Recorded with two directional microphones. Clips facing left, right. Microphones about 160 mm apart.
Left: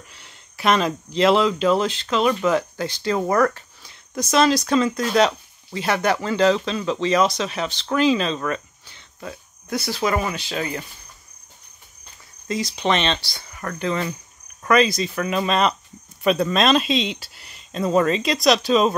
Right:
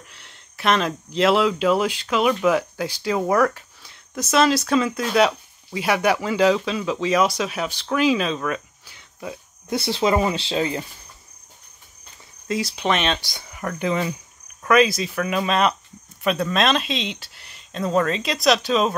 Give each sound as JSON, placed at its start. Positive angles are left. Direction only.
{"t": 0.1, "sound": "speech", "side_deg": 0}
{"t": 9.7, "sound": "speech", "side_deg": -25}
{"t": 12.4, "sound": "speech", "side_deg": -5}
{"t": 13.2, "sound": "speech", "side_deg": -15}